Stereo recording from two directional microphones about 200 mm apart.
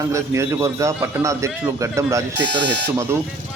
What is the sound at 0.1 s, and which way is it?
A man's voice, 15° right (ahead or behind).